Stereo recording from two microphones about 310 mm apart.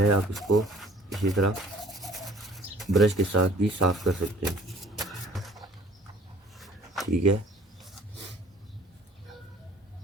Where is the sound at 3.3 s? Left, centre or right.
Right.